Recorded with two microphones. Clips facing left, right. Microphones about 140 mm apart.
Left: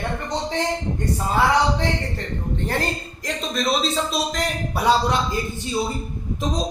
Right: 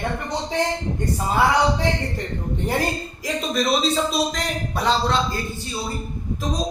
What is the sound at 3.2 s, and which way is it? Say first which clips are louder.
A man's voice: right 2 dB; 5° right (ahead or behind).